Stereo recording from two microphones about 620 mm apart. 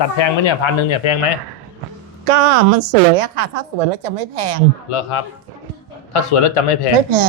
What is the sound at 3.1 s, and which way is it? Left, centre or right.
A woman's voice, right.